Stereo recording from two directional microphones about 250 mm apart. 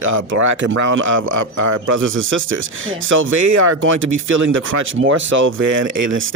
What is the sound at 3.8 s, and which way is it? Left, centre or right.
Speech, right.